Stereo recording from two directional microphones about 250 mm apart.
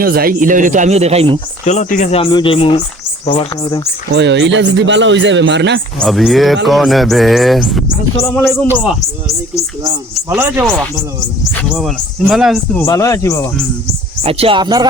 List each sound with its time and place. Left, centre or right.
0.0 s speech: right
1.6 s speech: left
4.1 s speech: right
6.0 s speech: centre
10.2 s speech: centre
12.8 s speech: centre
14.3 s speech: right